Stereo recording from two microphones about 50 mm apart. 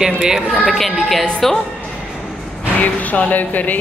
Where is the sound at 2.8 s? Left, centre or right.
Left.